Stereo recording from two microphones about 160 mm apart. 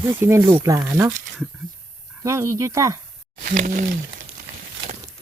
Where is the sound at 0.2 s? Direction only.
15° right (ahead or behind).